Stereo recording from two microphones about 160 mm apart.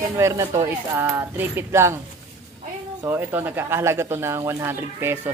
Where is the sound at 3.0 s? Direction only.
15° right (ahead or behind).